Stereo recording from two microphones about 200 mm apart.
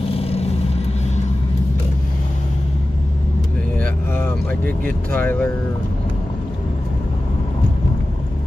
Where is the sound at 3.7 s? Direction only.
10° left (ahead or behind).